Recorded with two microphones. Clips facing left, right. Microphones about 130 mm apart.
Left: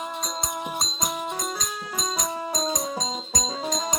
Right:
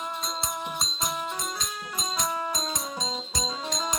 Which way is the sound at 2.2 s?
40° left (ahead or behind).